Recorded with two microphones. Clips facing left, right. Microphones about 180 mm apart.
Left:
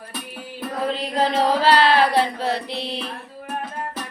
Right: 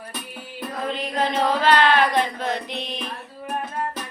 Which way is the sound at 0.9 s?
35° left (ahead or behind).